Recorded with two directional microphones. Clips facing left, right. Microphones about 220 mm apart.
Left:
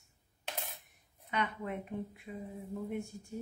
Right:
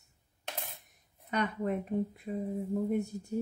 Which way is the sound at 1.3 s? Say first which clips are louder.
Right 5 dB; 40° right (ahead or behind).